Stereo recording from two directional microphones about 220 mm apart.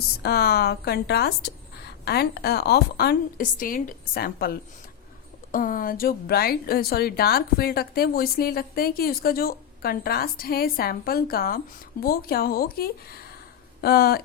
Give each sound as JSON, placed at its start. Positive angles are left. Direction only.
{"t": 0.2, "sound": "a woman's voice", "side_deg": 45}